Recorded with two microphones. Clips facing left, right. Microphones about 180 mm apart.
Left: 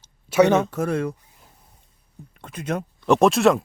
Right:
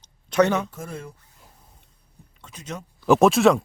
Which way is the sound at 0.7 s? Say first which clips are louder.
Left 12 dB; 70° left (ahead or behind).